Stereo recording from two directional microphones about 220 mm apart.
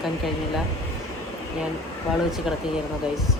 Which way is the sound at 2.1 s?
Centre (ahead or behind).